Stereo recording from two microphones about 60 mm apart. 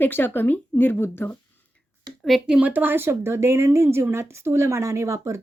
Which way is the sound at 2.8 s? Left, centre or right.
Right.